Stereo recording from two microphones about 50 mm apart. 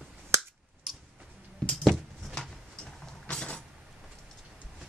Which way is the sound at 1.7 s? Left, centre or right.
Centre.